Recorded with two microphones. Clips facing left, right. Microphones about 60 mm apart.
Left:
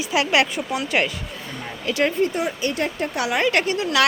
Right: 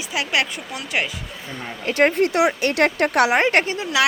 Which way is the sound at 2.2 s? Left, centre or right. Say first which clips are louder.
Right 4 dB; right.